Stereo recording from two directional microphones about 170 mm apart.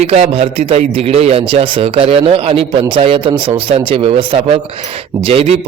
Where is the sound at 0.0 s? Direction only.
40° right (ahead or behind).